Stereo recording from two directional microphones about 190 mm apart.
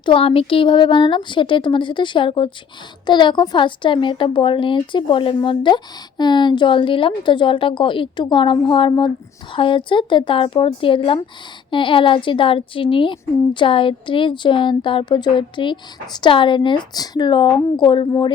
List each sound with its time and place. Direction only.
0.0 s speech: 30° left (ahead or behind)